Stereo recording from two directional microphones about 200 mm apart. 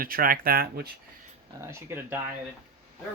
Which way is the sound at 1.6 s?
10° right (ahead or behind).